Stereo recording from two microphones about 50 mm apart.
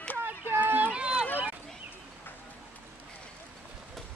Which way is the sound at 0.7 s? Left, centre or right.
Right.